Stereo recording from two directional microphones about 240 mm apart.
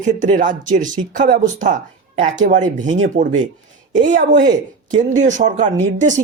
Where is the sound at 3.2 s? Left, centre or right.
Right.